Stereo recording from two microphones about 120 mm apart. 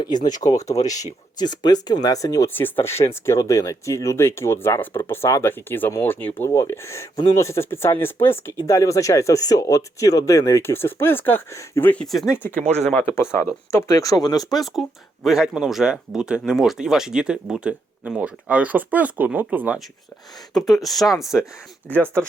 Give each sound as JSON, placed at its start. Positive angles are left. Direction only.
{"t": 0.0, "sound": "speech", "side_deg": 35}
{"t": 0.8, "sound": "speech", "side_deg": 80}
{"t": 1.4, "sound": "speech", "side_deg": 35}
{"t": 2.5, "sound": "speech", "side_deg": 15}
{"t": 12.0, "sound": "speech", "side_deg": 0}
{"t": 12.9, "sound": "speech", "side_deg": 15}
{"t": 14.5, "sound": "speech", "side_deg": 0}
{"t": 20.5, "sound": "speech", "side_deg": 0}
{"t": 21.8, "sound": "speech", "side_deg": -15}